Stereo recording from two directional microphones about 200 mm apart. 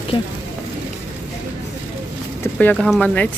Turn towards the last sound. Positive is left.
turn(degrees=5)  # may be behind; listen again after turning